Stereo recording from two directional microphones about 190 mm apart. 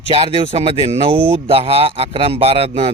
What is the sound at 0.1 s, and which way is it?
Speech, 30° right (ahead or behind).